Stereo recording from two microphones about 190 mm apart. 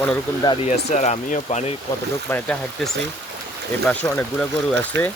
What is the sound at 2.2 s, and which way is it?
Speech, 10° left (ahead or behind).